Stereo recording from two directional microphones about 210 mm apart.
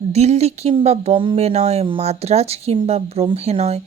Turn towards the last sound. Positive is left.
turn(degrees=-30)  # may be behind; listen again after turning